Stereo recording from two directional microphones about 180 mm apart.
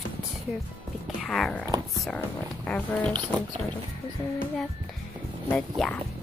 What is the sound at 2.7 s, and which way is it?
Speech, 10° left (ahead or behind).